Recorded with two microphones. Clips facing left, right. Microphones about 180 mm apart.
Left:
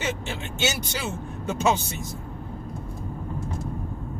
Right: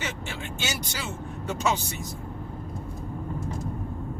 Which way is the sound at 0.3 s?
20° left (ahead or behind).